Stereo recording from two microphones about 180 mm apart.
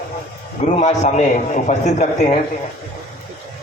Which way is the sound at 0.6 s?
40° left (ahead or behind).